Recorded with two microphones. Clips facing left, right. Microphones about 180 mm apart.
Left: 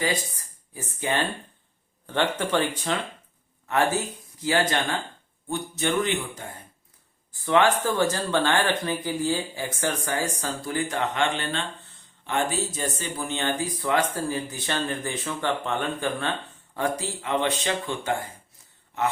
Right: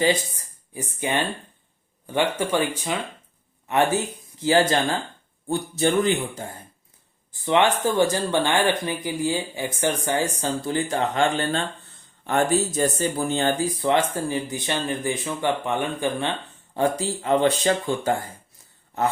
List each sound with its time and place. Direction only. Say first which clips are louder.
0.7 s speech: right 2 dB; 20° right (ahead or behind); by 6.5 s 35° right (ahead or behind)
7.4 s speech: right 1 dB; 20° right (ahead or behind); by 13.7 s 35° right (ahead or behind)
13.8 s speech: right 2 dB; 20° right (ahead or behind)
16.7 s speech: right 5 dB; 30° right (ahead or behind)